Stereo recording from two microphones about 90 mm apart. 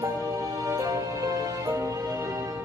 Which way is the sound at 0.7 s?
35° right (ahead or behind).